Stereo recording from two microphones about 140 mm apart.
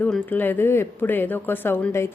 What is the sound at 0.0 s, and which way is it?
Speech, 15° left (ahead or behind).